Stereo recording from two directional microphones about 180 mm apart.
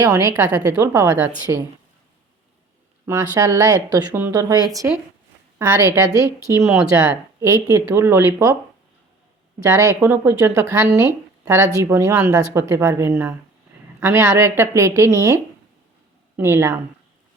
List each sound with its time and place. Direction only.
0.0 s speech: 20° right (ahead or behind)
3.1 s speech: 20° right (ahead or behind)
9.6 s speech: 15° right (ahead or behind)
16.4 s speech: 15° right (ahead or behind)